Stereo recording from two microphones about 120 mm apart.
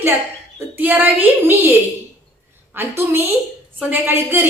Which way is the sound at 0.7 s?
15° right (ahead or behind).